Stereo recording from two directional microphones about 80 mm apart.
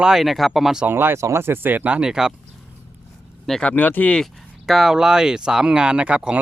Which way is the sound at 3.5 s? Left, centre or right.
Centre.